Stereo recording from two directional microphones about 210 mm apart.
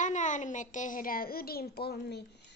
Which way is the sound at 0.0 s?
35° left (ahead or behind).